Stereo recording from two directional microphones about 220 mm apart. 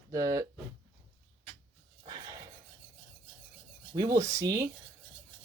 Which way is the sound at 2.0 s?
20° right (ahead or behind).